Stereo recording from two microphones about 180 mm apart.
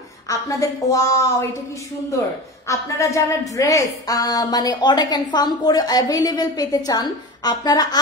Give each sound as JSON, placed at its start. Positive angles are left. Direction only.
{"t": 0.3, "sound": "a woman's voice", "side_deg": 20}
{"t": 2.7, "sound": "a woman's voice", "side_deg": 15}